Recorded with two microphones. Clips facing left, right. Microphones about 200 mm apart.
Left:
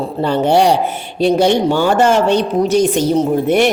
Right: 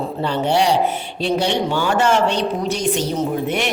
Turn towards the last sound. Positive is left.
turn(degrees=40)  # may be behind; listen again after turning